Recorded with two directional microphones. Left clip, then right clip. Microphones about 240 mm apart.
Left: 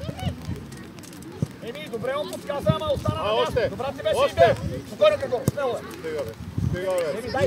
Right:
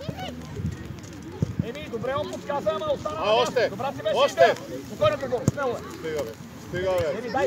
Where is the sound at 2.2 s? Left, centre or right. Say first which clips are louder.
Even; left.